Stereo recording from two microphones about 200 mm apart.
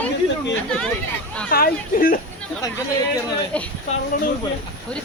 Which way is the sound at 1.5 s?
45° left (ahead or behind).